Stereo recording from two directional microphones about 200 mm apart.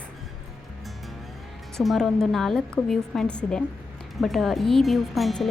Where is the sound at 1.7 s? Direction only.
Centre (ahead or behind).